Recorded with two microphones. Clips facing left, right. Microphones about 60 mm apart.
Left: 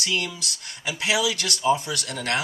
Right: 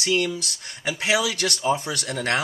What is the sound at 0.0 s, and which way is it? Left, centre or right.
Speech, right.